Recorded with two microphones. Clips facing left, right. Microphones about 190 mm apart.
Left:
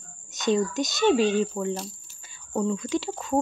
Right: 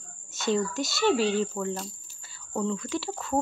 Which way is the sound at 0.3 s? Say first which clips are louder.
Left 3 dB; 20° left (ahead or behind).